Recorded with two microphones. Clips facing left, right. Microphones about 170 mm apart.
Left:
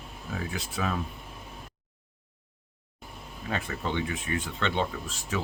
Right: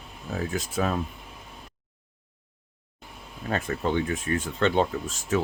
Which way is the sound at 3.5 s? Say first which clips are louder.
Right 5 dB; 45° right (ahead or behind).